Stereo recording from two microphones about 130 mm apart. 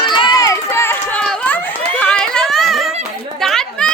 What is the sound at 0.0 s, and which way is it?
Run, 40° left (ahead or behind).